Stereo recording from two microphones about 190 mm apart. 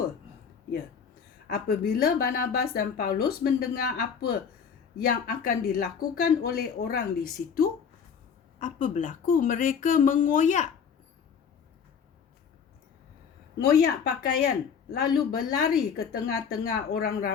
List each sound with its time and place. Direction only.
1.5 s speech: 50° left (ahead or behind)
13.6 s speech: 55° left (ahead or behind)